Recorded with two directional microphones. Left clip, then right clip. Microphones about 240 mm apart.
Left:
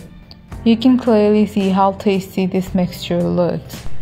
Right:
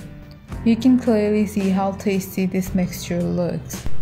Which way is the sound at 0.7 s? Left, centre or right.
Centre.